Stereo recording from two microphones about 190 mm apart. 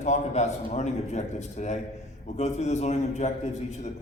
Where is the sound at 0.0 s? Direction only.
35° left (ahead or behind).